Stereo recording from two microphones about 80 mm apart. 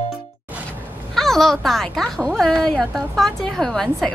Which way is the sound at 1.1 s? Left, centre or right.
Centre.